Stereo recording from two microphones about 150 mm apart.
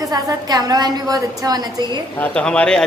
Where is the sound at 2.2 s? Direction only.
10° left (ahead or behind).